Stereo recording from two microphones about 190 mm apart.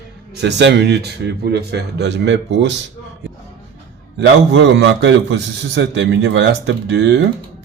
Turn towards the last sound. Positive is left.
turn(degrees=-65)  # may be behind; listen again after turning